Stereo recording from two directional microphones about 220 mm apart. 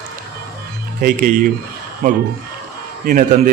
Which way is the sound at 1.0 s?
40° right (ahead or behind).